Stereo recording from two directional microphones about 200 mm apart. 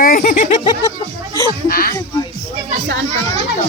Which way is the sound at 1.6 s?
45° left (ahead or behind).